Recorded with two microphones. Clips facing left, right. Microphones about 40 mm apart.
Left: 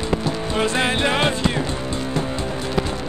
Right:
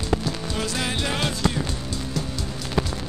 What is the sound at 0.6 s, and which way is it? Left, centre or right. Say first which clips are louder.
Music: left 9 dB; left.